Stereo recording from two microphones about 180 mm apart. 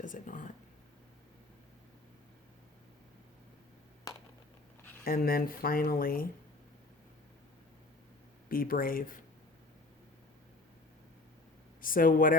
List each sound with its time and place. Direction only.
0.0 s speech: 45° left (ahead or behind)
4.1 s a sound: 20° left (ahead or behind)
5.0 s speech: 55° left (ahead or behind)
8.4 s speech: 50° left (ahead or behind)
11.8 s speech: 50° left (ahead or behind)